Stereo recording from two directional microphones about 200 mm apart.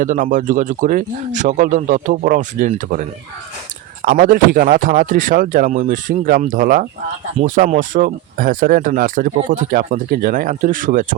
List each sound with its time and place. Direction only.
0.0 s speech: 40° right (ahead or behind)